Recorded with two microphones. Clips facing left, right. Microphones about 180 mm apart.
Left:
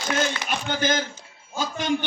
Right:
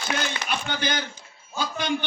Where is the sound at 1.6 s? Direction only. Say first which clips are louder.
Left 1 dB; 45° left (ahead or behind).